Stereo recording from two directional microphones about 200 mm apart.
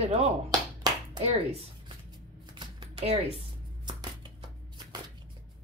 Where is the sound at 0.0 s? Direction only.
30° right (ahead or behind).